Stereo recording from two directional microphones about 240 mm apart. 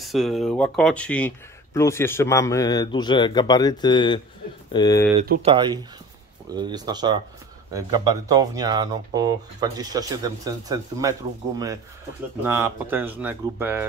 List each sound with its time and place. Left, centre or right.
0.0 s speech: centre
5.4 s speech: centre